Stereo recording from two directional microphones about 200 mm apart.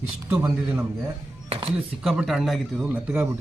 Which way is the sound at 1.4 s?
30° right (ahead or behind).